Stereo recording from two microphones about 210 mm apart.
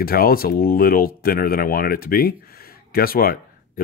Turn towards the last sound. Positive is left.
turn(degrees=45)  # may be behind; listen again after turning